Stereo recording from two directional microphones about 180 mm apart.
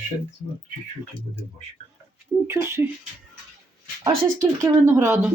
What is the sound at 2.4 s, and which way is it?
Speech, 15° right (ahead or behind).